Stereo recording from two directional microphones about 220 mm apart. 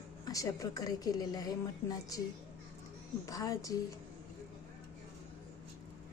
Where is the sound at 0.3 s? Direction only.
15° left (ahead or behind).